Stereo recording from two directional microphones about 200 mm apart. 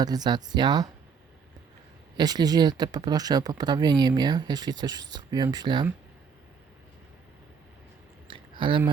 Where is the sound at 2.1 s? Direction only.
20° right (ahead or behind).